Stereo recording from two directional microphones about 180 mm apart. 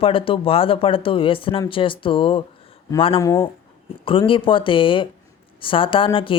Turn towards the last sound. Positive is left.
turn(degrees=30)  # may be behind; listen again after turning